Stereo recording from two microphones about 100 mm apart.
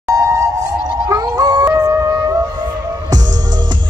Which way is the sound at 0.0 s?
35° right (ahead or behind).